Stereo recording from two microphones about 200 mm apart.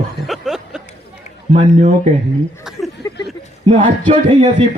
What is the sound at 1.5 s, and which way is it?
Speech, 35° right (ahead or behind).